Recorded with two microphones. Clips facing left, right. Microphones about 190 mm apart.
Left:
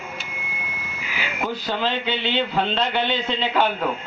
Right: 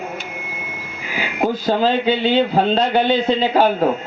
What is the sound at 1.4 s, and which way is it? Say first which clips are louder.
Speech: right 9 dB; 40° right (ahead or behind).